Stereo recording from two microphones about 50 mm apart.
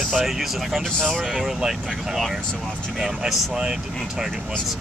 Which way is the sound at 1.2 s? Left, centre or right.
Centre.